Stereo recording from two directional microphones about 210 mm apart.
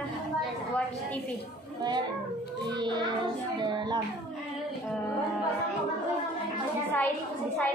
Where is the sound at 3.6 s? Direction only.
20° right (ahead or behind).